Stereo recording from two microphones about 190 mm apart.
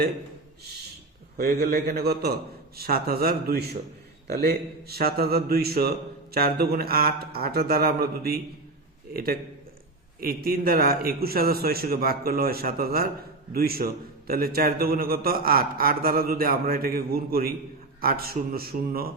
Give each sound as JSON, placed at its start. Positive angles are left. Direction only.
{"t": 1.4, "sound": "a man's voice", "side_deg": -55}